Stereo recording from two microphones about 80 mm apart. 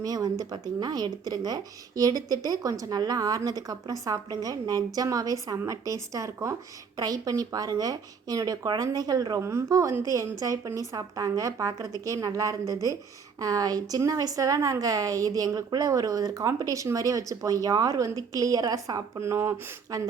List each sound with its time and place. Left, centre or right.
0.0 s speech: right
9.4 s speech: right
19.2 s speech: right
19.9 s speech: right